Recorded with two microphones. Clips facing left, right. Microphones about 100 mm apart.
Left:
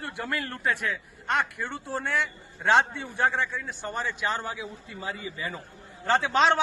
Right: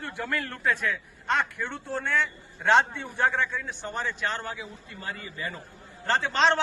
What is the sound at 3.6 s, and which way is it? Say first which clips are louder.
A man's voice: even; 5° left (ahead or behind).